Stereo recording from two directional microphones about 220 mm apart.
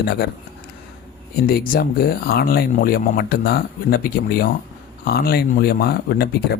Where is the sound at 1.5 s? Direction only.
40° left (ahead or behind).